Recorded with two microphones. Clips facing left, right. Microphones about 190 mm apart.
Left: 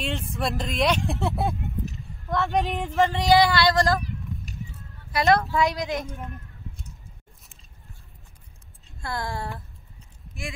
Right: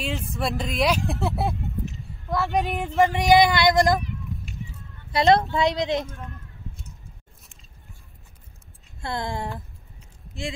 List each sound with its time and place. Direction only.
0.0 s speech: centre (ahead or behind); by 4.0 s 15° right (ahead or behind)
4.5 s a sound: 40° left (ahead or behind)
5.1 s speech: 25° right (ahead or behind)
6.0 s speech: 15° left (ahead or behind)
9.0 s speech: 20° right (ahead or behind)